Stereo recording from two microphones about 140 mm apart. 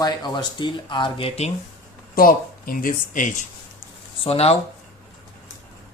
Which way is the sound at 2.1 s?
90° left.